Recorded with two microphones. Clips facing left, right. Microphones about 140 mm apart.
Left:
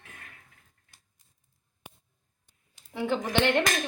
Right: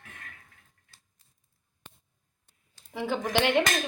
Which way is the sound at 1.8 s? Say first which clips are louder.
Left 3 dB; 10° left (ahead or behind).